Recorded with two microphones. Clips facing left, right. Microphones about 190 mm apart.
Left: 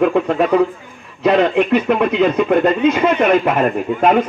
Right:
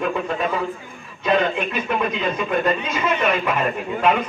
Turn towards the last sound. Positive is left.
turn(degrees=50)  # may be behind; listen again after turning